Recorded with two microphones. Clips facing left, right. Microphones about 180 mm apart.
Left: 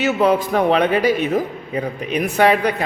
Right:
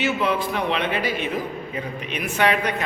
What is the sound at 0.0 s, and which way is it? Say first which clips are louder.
A man's voice: left 6 dB; 40° left (ahead or behind).